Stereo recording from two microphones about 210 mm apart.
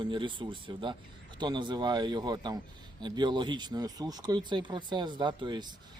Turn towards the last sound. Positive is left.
turn(degrees=-20)  # may be behind; listen again after turning